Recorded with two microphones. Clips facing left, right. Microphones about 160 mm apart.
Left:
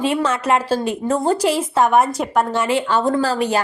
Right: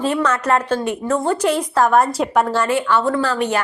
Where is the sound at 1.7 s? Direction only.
20° left (ahead or behind).